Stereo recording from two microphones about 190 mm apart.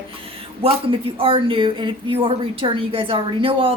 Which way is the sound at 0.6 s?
30° right (ahead or behind).